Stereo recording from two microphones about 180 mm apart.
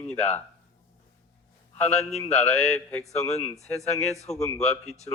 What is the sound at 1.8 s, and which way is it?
Speech, 40° left (ahead or behind).